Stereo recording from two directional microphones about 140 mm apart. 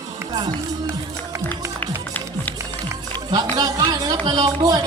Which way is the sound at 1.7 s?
10° left (ahead or behind).